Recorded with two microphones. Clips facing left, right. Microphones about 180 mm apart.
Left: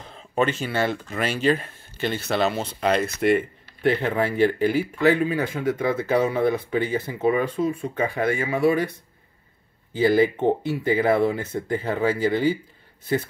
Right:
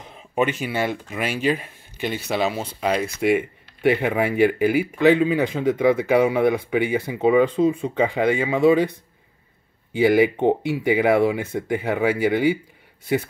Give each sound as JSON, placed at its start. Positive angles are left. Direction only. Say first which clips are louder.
{"t": 0.0, "sound": "a sound", "louder": "even", "side_deg": -15}
{"t": 0.4, "sound": "speech", "louder": "right 1 dB", "side_deg": -15}
{"t": 9.9, "sound": "speech", "louder": "right 2 dB", "side_deg": -15}